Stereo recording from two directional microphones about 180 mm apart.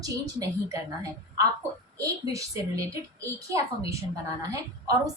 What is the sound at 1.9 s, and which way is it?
A woman's voice, 20° right (ahead or behind).